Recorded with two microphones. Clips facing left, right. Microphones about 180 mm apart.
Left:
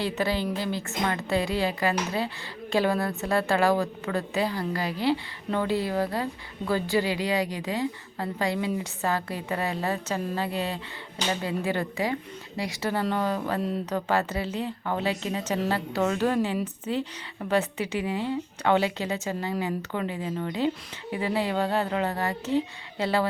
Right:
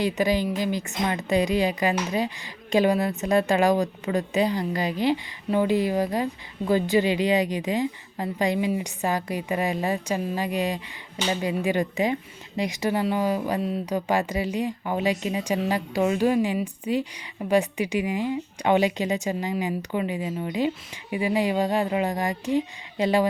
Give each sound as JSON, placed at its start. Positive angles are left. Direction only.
{"t": 0.0, "sound": "a woman's voice", "side_deg": -15}